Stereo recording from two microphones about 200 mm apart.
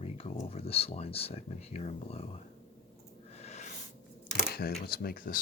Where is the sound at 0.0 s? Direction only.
30° left (ahead or behind).